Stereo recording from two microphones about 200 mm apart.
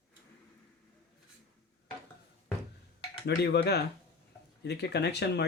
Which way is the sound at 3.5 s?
55° left (ahead or behind).